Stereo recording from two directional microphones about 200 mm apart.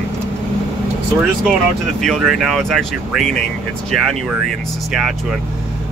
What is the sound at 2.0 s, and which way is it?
Speech, centre (ahead or behind).